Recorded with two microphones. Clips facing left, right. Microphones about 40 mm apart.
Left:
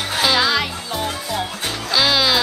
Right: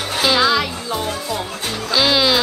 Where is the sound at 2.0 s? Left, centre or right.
Centre.